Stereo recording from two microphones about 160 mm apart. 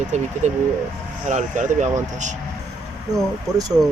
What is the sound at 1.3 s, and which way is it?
Speech, 50° right (ahead or behind).